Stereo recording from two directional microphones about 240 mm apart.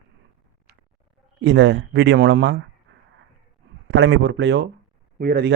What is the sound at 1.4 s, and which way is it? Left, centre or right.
A man's voice, right.